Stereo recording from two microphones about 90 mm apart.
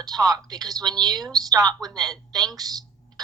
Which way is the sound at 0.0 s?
45° right (ahead or behind).